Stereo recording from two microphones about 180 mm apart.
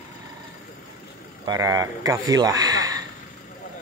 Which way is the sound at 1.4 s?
20° right (ahead or behind).